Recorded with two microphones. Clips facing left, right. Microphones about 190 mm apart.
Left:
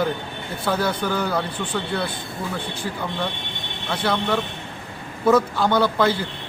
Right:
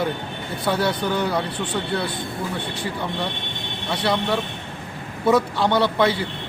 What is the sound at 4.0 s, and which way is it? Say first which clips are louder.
Speech: even; 10° right (ahead or behind).